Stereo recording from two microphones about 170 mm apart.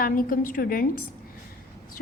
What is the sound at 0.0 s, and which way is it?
Speech, 55° left (ahead or behind).